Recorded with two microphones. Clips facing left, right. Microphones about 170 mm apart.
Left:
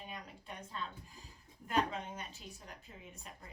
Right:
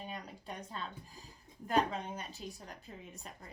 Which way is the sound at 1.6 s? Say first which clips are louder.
Right 3 dB; 35° right (ahead or behind).